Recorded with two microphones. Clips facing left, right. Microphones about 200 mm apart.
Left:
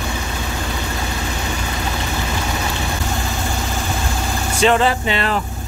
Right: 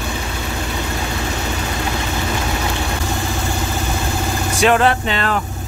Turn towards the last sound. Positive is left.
turn(degrees=5)  # may be behind; listen again after turning